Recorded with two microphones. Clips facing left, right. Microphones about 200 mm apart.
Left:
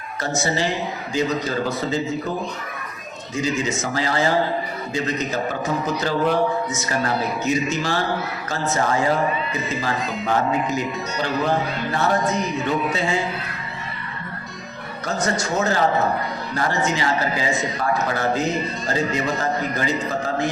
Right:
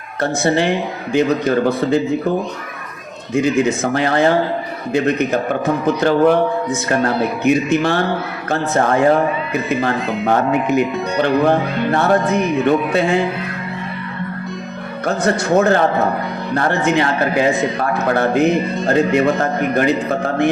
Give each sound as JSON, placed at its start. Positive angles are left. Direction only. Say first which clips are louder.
{"t": 0.2, "sound": "a man's voice", "louder": "right 7 dB", "side_deg": -60}
{"t": 3.3, "sound": "a man's voice", "louder": "right 8 dB", "side_deg": -60}
{"t": 15.0, "sound": "a man's voice", "louder": "right 6 dB", "side_deg": -60}